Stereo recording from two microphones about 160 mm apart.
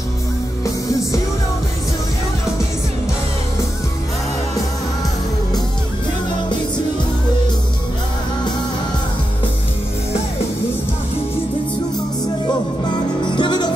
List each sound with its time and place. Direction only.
0.7 s music: 20° left (ahead or behind)
13.3 s music: 30° left (ahead or behind)